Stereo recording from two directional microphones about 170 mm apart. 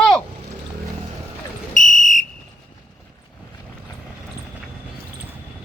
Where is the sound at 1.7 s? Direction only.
45° left (ahead or behind).